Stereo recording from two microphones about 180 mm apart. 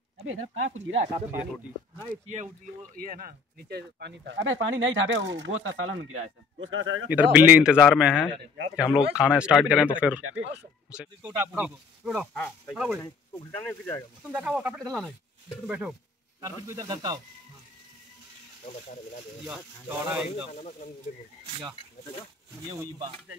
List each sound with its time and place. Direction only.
0.3 s speech: 90° right
1.3 s speech: 10° right (ahead or behind)
2.2 s speech: 40° right (ahead or behind)
3.0 s speech: 55° right (ahead or behind); by 7.0 s 90° right
7.1 s speech: 10° right (ahead or behind); by 12.7 s 10° left (ahead or behind)
12.7 s speech: 5° right (ahead or behind)
13.6 s speech: 10° left (ahead or behind)
14.2 s speech: 5° right (ahead or behind)
16.3 s speech: 20° right (ahead or behind)
19.4 s speech: 10° right (ahead or behind)
20.5 s speech: 40° left (ahead or behind)
22.8 s speech: 20° right (ahead or behind)